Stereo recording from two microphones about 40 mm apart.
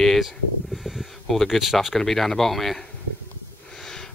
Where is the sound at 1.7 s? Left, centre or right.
Centre.